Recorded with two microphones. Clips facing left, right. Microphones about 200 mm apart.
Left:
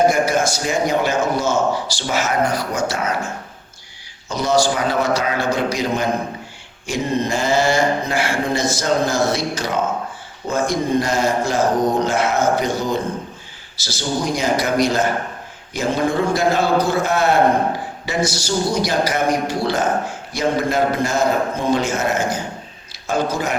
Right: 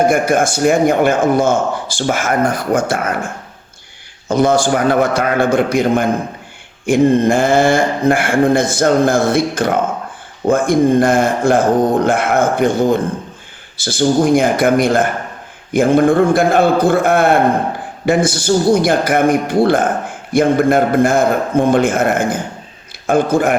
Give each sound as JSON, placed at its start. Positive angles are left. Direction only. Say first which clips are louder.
{"t": 0.1, "sound": "a man's voice", "louder": "right 4 dB", "side_deg": -55}